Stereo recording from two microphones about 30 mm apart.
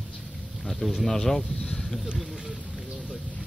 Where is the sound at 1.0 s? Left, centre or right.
Centre.